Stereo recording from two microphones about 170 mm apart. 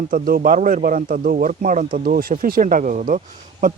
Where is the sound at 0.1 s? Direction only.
55° right (ahead or behind).